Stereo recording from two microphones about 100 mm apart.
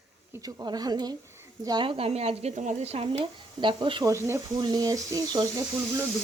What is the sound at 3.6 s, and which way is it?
Speech, 55° right (ahead or behind).